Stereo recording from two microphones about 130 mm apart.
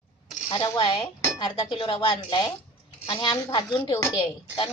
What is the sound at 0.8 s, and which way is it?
Speech, 40° left (ahead or behind).